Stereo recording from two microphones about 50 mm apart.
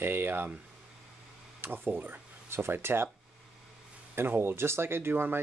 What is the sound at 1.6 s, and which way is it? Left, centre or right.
Speech, right.